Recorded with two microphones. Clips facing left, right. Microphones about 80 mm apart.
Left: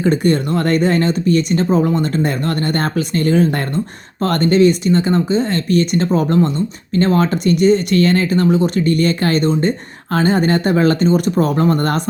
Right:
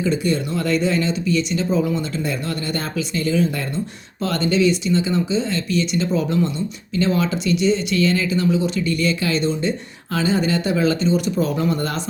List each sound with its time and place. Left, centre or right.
0.0 s speech: left